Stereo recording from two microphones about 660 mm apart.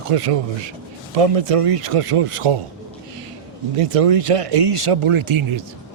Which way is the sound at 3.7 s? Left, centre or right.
Right.